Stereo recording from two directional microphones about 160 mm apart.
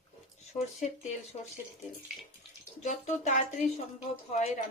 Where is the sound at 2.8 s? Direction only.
50° left (ahead or behind).